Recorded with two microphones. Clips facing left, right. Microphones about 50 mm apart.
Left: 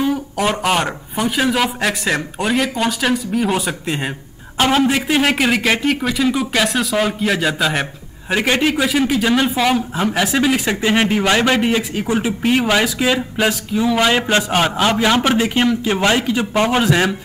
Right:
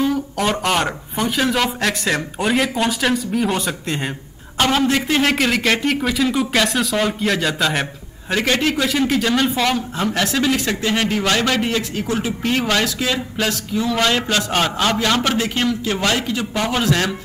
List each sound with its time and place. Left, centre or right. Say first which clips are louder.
0.0 s a man's voice: left 1 dB; centre